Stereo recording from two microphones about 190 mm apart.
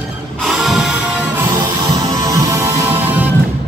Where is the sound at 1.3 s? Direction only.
15° right (ahead or behind).